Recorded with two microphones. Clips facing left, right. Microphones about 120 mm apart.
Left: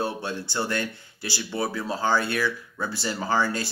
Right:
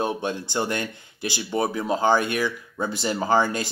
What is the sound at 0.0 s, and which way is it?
Speech, 20° right (ahead or behind).